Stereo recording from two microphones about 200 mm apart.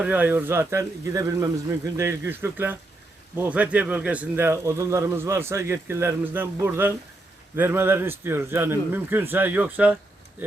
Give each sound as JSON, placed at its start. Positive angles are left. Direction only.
{"t": 0.0, "sound": "speech", "side_deg": -10}